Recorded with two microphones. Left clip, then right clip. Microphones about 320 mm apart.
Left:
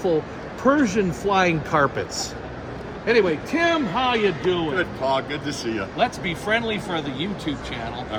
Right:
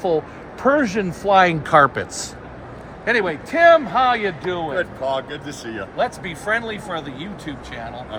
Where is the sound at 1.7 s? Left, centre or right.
Right.